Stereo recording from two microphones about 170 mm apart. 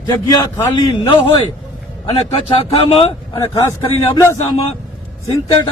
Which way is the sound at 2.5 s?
30° left (ahead or behind).